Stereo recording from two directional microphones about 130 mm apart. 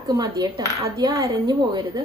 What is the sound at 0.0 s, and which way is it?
Speech, 25° right (ahead or behind).